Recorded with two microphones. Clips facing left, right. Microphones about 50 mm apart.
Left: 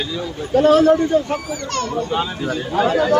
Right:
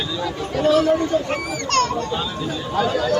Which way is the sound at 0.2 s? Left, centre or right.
Right.